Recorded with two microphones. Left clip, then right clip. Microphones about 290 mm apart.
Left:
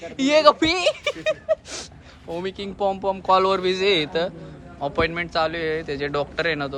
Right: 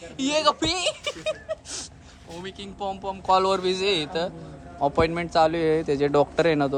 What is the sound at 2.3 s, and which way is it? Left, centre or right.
Speech, centre.